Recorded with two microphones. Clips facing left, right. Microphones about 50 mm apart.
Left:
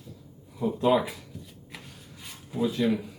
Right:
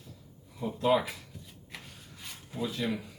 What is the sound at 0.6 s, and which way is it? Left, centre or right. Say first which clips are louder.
Speech: left 3 dB; centre.